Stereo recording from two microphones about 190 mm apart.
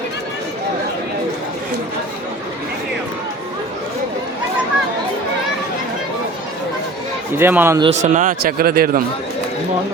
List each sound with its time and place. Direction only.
7.3 s speech: 10° right (ahead or behind)
7.8 s speech: 35° right (ahead or behind); by 9.0 s 50° right (ahead or behind)